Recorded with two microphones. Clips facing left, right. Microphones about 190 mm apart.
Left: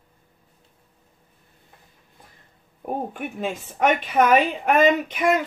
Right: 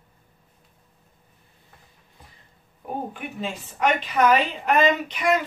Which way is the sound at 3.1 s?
50° left (ahead or behind).